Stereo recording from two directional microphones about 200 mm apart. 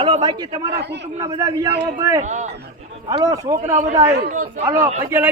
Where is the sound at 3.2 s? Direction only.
15° right (ahead or behind).